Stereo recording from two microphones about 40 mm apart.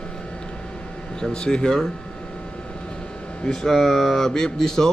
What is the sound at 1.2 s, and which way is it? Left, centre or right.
Speech, left.